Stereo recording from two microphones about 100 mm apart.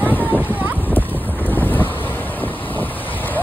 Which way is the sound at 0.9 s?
20° left (ahead or behind).